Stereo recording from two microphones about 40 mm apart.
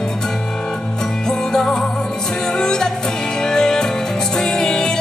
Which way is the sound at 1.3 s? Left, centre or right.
Centre.